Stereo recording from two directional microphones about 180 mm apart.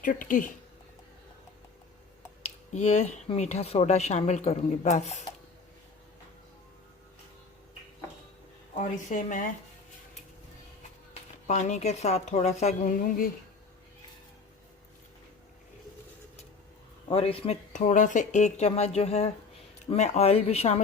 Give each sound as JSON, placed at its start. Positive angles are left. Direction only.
{"t": 0.0, "sound": "speech", "side_deg": 50}
{"t": 2.7, "sound": "a woman's voice", "side_deg": 40}
{"t": 8.8, "sound": "speech", "side_deg": 45}
{"t": 11.4, "sound": "a woman's voice", "side_deg": 40}
{"t": 17.1, "sound": "a woman's voice", "side_deg": 30}